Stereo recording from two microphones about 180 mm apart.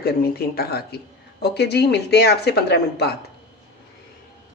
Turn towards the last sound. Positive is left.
turn(degrees=65)  # may be behind; listen again after turning